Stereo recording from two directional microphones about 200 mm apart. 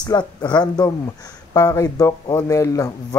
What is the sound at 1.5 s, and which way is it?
A man's voice, 20° left (ahead or behind).